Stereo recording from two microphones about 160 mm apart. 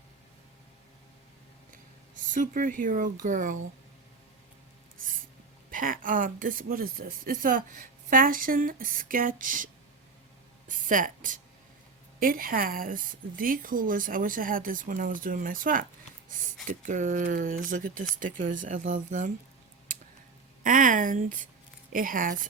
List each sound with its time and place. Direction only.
1.7 s speech: 55° right (ahead or behind)
5.7 s speech: 60° right (ahead or behind)
10.7 s a woman's voice: 55° right (ahead or behind)
16.6 s speech: 50° right (ahead or behind)
20.7 s speech: 55° right (ahead or behind)